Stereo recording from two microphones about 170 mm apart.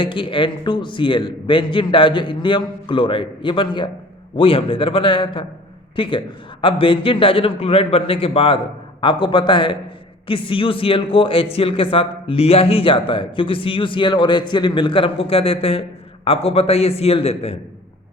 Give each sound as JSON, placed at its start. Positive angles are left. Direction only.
{"t": 0.0, "sound": "a man's voice", "side_deg": 30}